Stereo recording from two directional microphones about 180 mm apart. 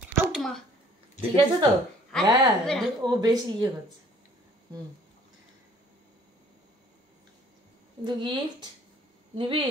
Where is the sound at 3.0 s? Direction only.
20° right (ahead or behind).